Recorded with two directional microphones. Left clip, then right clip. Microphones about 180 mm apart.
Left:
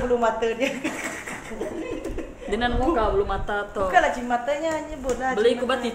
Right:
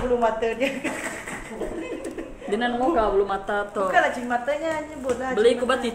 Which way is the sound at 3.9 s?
10° left (ahead or behind).